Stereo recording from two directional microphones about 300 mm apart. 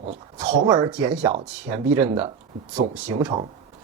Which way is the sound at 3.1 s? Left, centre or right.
Centre.